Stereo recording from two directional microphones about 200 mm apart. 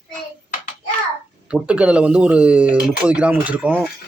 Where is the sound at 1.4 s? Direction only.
5° right (ahead or behind).